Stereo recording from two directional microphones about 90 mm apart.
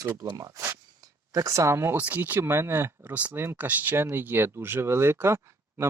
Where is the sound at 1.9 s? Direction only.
20° right (ahead or behind).